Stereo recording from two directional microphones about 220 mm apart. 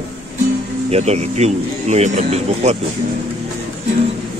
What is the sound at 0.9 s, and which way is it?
Speech, 30° right (ahead or behind).